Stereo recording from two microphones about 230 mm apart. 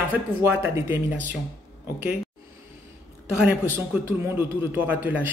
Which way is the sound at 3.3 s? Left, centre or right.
Centre.